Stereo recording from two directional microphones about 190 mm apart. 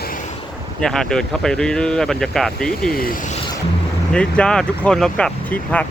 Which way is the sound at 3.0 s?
45° left (ahead or behind).